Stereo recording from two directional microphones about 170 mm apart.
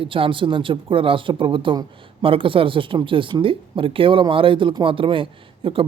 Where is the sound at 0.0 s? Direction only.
30° right (ahead or behind).